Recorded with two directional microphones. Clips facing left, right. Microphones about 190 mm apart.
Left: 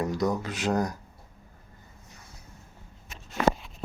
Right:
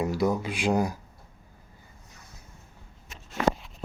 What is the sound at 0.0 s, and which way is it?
Speech, 10° right (ahead or behind).